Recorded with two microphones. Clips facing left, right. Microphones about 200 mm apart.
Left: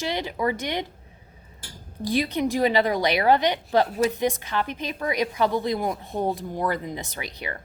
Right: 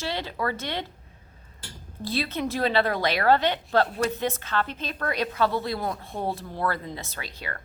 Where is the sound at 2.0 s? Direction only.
15° left (ahead or behind).